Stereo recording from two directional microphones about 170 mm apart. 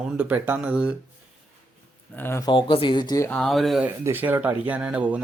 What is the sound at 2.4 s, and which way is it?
Speech, 30° left (ahead or behind).